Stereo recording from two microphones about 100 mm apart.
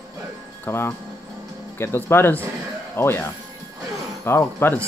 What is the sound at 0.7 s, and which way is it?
Speech, 25° left (ahead or behind).